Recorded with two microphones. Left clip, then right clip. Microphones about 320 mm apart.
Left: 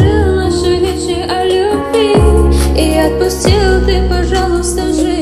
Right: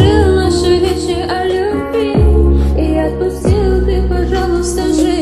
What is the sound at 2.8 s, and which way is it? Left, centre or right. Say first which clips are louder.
Music: left 5 dB; left.